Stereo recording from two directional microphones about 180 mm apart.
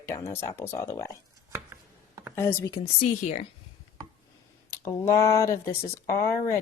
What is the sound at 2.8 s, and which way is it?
Speech, 40° left (ahead or behind).